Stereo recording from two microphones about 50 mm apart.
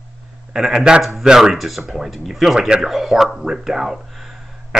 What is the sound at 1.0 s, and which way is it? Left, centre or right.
Speech, centre.